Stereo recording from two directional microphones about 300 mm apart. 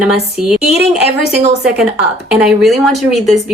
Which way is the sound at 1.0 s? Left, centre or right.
Left.